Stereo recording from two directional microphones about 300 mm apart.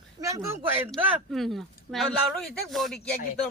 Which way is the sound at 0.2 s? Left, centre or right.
Centre.